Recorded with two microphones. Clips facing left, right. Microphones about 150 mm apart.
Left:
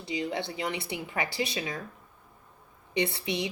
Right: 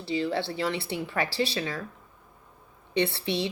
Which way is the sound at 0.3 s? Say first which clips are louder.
Right 4 dB; 65° right (ahead or behind).